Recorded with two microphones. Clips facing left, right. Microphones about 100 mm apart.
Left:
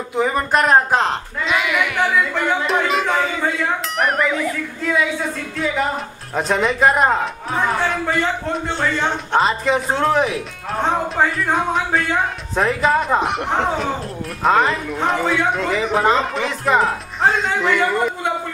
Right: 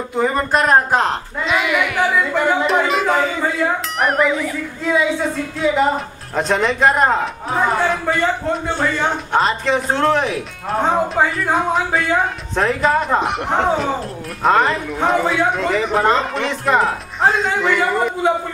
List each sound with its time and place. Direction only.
0.2 s a woman's voice: centre (ahead or behind)